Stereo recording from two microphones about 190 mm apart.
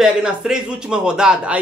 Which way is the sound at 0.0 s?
5° right (ahead or behind).